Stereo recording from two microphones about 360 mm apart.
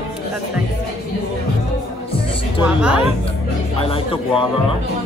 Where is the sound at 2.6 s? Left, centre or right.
Centre.